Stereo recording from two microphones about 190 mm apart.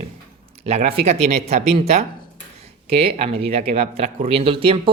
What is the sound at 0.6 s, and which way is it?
Speech, 35° right (ahead or behind).